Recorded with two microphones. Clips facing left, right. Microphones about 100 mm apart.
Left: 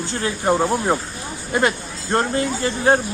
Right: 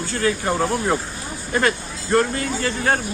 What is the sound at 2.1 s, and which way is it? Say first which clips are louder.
Speech: even; 25° left (ahead or behind).